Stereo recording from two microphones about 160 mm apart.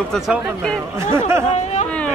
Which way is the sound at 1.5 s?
45° left (ahead or behind).